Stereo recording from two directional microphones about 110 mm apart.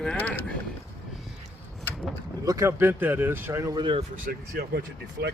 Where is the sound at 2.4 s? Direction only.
30° right (ahead or behind).